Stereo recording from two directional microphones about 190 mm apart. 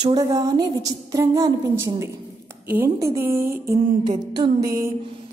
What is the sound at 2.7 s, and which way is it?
Speech, 15° right (ahead or behind).